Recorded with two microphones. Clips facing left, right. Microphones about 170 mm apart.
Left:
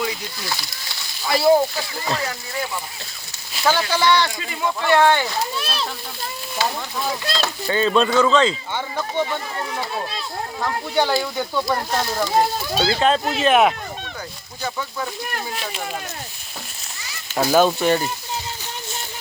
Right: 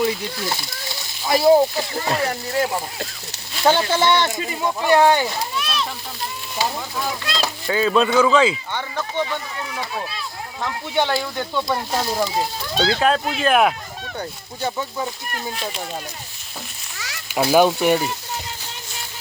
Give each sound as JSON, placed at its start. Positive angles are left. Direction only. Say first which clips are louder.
{"t": 0.0, "sound": "speech", "louder": "right 5 dB", "side_deg": -25}
{"t": 2.2, "sound": "speech", "louder": "right 6 dB", "side_deg": -45}
{"t": 2.6, "sound": "speech", "louder": "right 6 dB", "side_deg": -60}
{"t": 3.6, "sound": "speech", "louder": "right 2 dB", "side_deg": -25}
{"t": 5.5, "sound": "splash", "louder": "right 2 dB", "side_deg": 35}
{"t": 7.3, "sound": "speech", "louder": "right 1 dB", "side_deg": -5}
{"t": 8.7, "sound": "speech", "louder": "left 1 dB", "side_deg": 10}
{"t": 10.6, "sound": "speech", "louder": "left 1 dB", "side_deg": 0}
{"t": 11.7, "sound": "speech", "louder": "even", "side_deg": -10}
{"t": 12.7, "sound": "speech", "louder": "right 1 dB", "side_deg": 5}
{"t": 14.6, "sound": "speech", "louder": "right 2 dB", "side_deg": -20}
{"t": 17.3, "sound": "speech", "louder": "right 1 dB", "side_deg": -10}